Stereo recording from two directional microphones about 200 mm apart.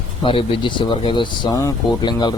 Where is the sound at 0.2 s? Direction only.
25° left (ahead or behind).